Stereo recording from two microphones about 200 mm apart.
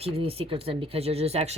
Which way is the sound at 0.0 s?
30° right (ahead or behind).